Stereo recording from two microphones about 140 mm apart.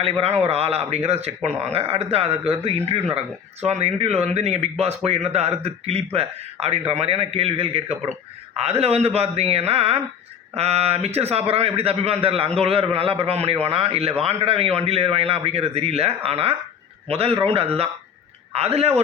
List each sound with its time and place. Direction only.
0.2 s a man's voice: 50° right (ahead or behind)